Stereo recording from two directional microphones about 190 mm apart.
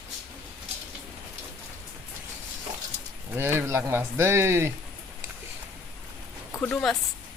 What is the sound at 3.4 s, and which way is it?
Speech, 10° right (ahead or behind).